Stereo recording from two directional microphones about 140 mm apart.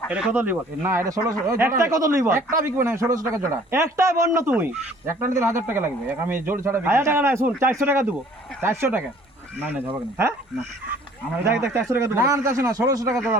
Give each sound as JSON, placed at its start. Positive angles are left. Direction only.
{"t": 0.1, "sound": "speech", "side_deg": -10}
{"t": 11.4, "sound": "speech", "side_deg": -15}